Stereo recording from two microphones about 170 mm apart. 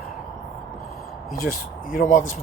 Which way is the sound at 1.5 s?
55° left (ahead or behind).